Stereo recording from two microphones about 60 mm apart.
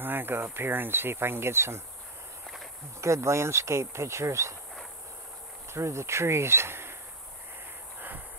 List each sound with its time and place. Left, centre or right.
0.0 s speech: right
3.0 s speech: right
5.7 s speech: right